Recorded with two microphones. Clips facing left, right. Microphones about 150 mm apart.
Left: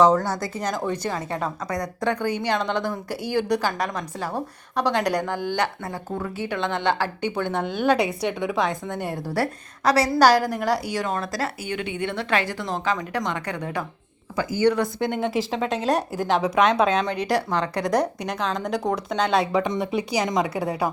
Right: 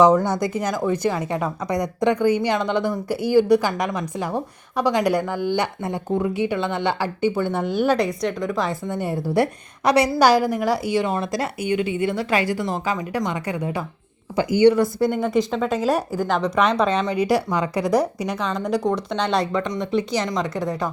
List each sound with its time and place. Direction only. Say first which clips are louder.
0.0 s a woman's voice: right 3 dB; 15° right (ahead or behind)
5.8 s a woman's voice: right 7 dB; 20° right (ahead or behind)
7.9 s a woman's voice: right 1 dB; 5° left (ahead or behind)
9.3 s a woman's voice: right 6 dB; 20° right (ahead or behind); by 20.9 s 10° left (ahead or behind)